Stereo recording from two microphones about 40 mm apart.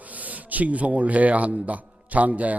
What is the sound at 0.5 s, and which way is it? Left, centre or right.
A man's voice, right.